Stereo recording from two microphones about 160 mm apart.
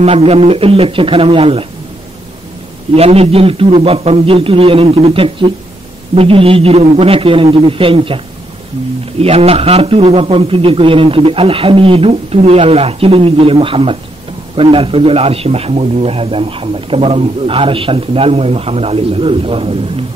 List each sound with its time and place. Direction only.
0.0 s a man's voice: 40° right (ahead or behind)
2.9 s a man's voice: 40° right (ahead or behind)
9.2 s a man's voice: 40° right (ahead or behind)